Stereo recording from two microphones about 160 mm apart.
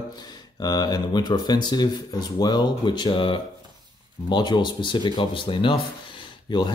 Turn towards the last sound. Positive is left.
turn(degrees=25)  # may be behind; listen again after turning